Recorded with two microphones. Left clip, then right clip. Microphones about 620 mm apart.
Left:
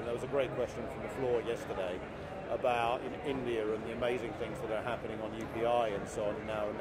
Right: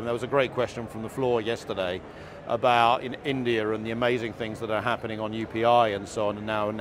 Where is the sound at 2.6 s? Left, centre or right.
Right.